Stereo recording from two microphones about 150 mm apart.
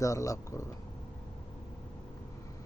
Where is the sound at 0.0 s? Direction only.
20° left (ahead or behind).